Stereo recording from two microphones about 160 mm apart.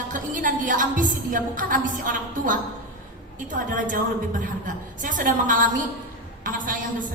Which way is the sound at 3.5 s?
55° right (ahead or behind).